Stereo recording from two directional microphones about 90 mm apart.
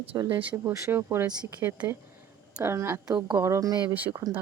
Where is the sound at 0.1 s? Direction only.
45° right (ahead or behind).